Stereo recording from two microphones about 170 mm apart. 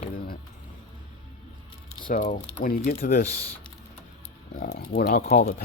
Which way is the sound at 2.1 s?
50° left (ahead or behind).